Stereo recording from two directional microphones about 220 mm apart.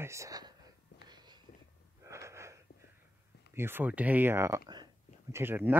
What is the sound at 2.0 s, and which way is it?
Wheeze, 10° right (ahead or behind).